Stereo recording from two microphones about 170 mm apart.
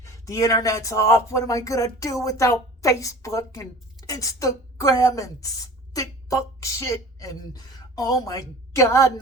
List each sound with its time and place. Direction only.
0.0 s speech: 20° left (ahead or behind)